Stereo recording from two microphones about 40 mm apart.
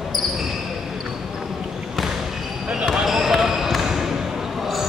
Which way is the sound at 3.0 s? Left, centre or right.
Centre.